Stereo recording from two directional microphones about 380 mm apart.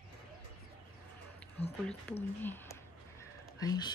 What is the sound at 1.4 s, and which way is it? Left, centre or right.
Speech, centre.